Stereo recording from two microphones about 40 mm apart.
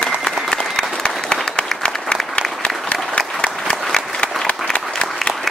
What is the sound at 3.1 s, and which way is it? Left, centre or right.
Applause, left.